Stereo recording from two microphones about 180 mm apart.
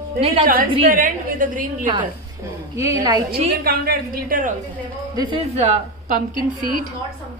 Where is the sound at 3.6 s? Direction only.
55° right (ahead or behind).